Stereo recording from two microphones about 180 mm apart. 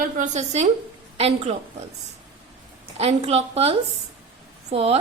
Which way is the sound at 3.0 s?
35° right (ahead or behind).